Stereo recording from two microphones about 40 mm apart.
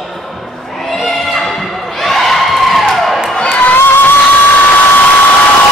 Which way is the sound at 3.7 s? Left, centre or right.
Left.